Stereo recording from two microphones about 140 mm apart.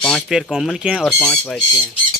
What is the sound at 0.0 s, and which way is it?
Speech, centre (ahead or behind).